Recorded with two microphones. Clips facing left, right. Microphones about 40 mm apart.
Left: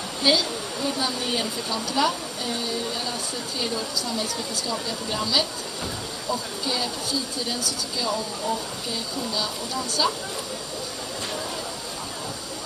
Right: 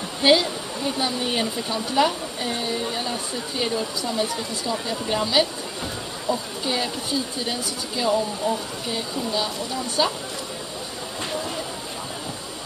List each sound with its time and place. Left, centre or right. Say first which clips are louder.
0.2 s speech: right 4 dB; right